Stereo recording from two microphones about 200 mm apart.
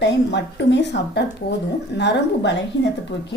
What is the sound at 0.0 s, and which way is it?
A woman's voice, 60° left (ahead or behind).